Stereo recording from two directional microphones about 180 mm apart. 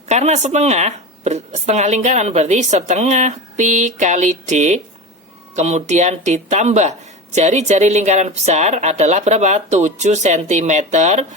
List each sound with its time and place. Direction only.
0.1 s speech: 40° right (ahead or behind)